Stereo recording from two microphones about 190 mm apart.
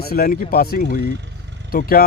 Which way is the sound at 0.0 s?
50° left (ahead or behind).